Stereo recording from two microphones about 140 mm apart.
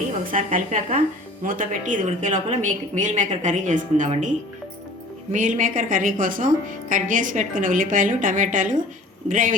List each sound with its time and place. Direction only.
0.3 s a woman's voice: 75° right (ahead or behind)
5.3 s a woman's voice: 65° right (ahead or behind)